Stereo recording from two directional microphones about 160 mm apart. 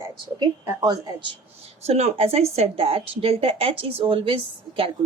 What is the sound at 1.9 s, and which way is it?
Speech, 40° right (ahead or behind).